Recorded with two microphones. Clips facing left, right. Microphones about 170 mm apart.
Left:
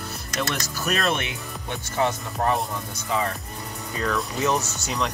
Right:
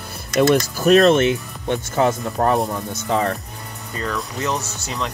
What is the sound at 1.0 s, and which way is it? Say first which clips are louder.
Speech: right 12 dB; 45° right (ahead or behind).